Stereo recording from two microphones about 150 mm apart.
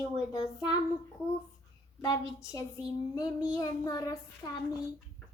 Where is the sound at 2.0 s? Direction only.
25° left (ahead or behind).